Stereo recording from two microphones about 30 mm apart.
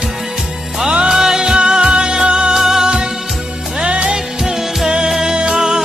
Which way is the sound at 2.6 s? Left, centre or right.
Centre.